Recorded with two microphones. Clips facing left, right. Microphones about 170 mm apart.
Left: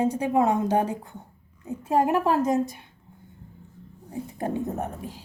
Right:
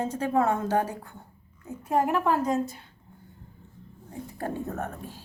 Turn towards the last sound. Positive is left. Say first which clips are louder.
# left 3 dB
turn(degrees=15)  # may be behind; listen again after turning